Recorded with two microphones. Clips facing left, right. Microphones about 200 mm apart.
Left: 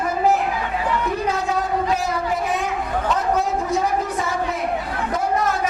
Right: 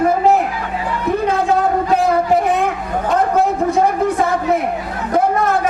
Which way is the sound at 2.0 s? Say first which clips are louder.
Right 8 dB; 55° right (ahead or behind).